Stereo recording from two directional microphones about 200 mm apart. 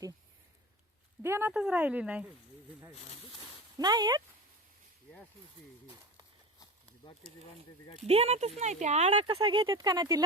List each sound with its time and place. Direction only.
1.2 s speech: 10° right (ahead or behind)
3.8 s speech: 20° right (ahead or behind)
6.6 s a sound: 25° left (ahead or behind)
8.0 s speech: 30° right (ahead or behind)